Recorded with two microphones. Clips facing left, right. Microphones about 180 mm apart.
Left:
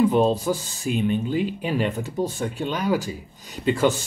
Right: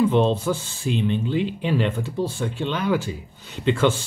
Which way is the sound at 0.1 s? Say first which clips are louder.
Even; 40° left (ahead or behind).